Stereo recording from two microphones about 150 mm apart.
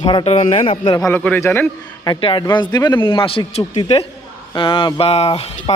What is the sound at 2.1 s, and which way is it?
Speech, 35° left (ahead or behind).